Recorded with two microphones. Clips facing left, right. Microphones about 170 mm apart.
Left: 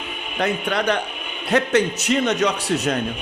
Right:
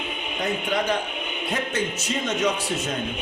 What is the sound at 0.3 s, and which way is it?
A man's voice, 75° left (ahead or behind).